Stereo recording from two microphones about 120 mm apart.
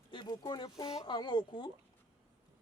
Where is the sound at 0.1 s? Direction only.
40° left (ahead or behind).